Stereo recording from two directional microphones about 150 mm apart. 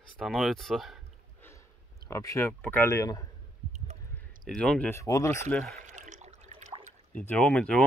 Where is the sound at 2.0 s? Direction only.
20° left (ahead or behind).